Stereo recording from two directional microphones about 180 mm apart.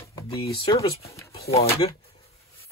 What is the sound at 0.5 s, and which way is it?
Speech, 20° left (ahead or behind).